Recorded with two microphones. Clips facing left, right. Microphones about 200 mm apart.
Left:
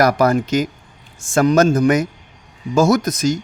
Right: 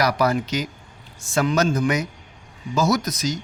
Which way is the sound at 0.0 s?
50° left (ahead or behind).